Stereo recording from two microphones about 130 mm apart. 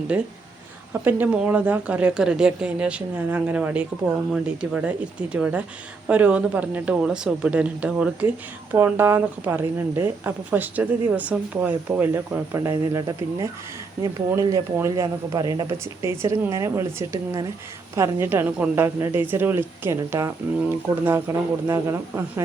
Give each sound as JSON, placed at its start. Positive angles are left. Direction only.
{"t": 0.1, "sound": "a woman's voice", "side_deg": -10}